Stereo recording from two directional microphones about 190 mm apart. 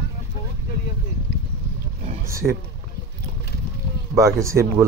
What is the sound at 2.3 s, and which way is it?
Speech, 15° right (ahead or behind).